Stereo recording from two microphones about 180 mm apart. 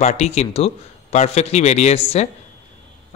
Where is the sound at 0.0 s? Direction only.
35° left (ahead or behind).